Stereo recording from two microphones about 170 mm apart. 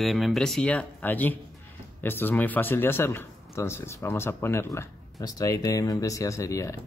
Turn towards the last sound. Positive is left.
turn(degrees=20)  # may be behind; listen again after turning